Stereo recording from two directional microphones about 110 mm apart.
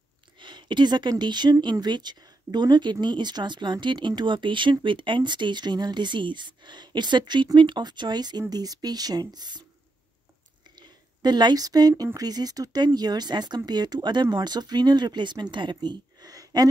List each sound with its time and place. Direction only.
0.4 s speech: 45° right (ahead or behind)
10.8 s a sound: 40° right (ahead or behind)
12.0 s a woman's voice: 35° right (ahead or behind)